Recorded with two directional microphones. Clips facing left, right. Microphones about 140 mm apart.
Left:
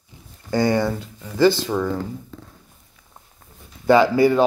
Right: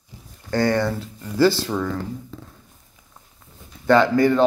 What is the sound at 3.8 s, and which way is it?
Speech, 5° left (ahead or behind).